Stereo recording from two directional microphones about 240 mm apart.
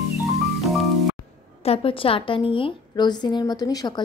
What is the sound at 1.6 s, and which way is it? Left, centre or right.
A woman's voice, left.